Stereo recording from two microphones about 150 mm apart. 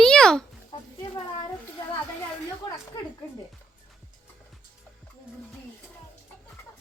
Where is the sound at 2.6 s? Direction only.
30° left (ahead or behind).